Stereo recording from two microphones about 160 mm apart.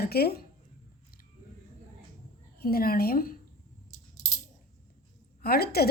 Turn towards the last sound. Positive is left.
turn(degrees=75)  # may be behind; listen again after turning